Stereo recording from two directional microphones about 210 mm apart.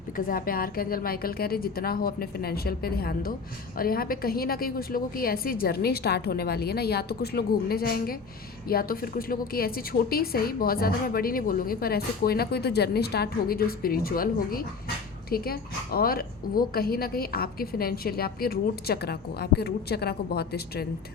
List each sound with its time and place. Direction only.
0.3 s a woman's voice: 45° left (ahead or behind)